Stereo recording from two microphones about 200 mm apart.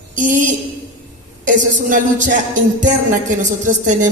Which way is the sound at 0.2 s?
40° right (ahead or behind).